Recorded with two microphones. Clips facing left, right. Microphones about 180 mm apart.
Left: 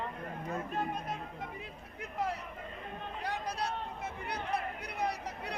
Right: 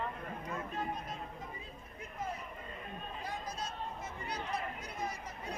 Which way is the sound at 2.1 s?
75° left (ahead or behind).